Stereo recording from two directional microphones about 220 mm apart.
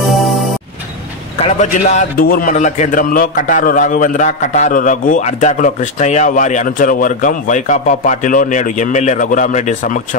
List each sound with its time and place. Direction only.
1.4 s a man's voice: 30° left (ahead or behind)